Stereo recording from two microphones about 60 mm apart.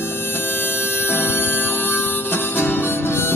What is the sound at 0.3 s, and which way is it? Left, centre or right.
Music, left.